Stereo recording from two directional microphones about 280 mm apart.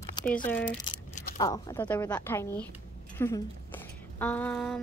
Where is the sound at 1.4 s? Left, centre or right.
Centre.